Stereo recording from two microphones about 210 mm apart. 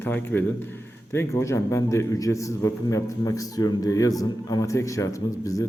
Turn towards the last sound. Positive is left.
turn(degrees=15)  # may be behind; listen again after turning